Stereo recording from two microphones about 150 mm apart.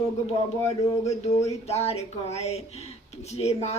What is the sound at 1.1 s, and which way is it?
Speech, 45° left (ahead or behind).